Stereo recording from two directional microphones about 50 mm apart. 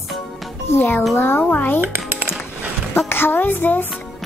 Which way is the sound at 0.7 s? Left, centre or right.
Left.